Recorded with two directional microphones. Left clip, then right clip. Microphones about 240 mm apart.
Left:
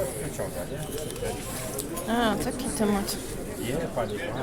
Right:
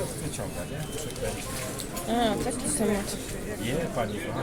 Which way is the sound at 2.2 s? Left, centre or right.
Left.